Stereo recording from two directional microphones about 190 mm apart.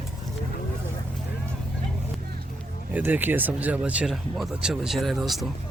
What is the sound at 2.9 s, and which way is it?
Speech, 10° right (ahead or behind).